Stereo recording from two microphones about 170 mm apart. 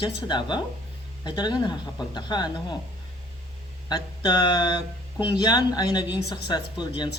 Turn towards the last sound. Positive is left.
turn(degrees=25)  # may be behind; listen again after turning